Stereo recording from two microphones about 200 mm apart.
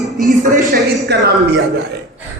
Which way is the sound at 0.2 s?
40° right (ahead or behind).